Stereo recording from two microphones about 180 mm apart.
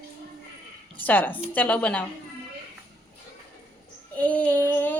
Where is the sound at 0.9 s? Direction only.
10° left (ahead or behind).